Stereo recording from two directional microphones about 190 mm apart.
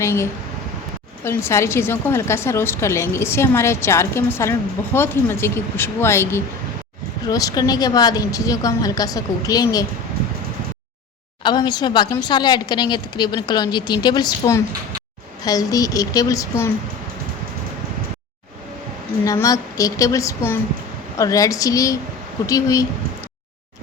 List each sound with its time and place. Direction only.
0.0 s a sound: 15° left (ahead or behind)
1.2 s a woman's voice: 15° left (ahead or behind)
11.4 s a woman's voice: 20° left (ahead or behind)
19.2 s a woman's voice: 15° left (ahead or behind)